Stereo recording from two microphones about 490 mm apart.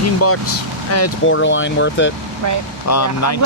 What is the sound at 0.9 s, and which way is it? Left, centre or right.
Speech, left.